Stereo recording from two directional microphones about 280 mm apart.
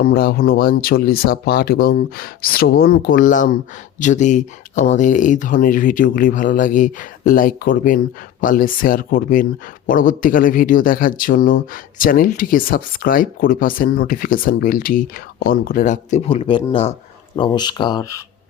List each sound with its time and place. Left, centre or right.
0.0 s speech: left; by 18.2 s centre